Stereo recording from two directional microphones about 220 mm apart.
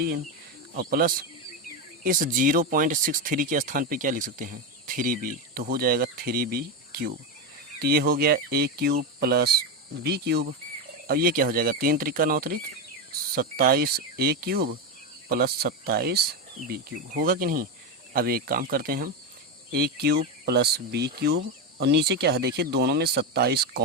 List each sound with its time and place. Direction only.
0.8 s speech: 40° right (ahead or behind)